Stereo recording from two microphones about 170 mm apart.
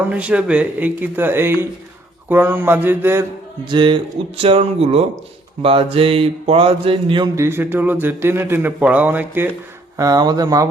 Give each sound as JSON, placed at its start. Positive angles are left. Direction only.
{"t": 0.1, "sound": "a man's voice", "side_deg": -5}
{"t": 3.7, "sound": "mantra", "side_deg": -30}
{"t": 7.3, "sound": "a man's voice", "side_deg": -15}
{"t": 10.0, "sound": "speech", "side_deg": -20}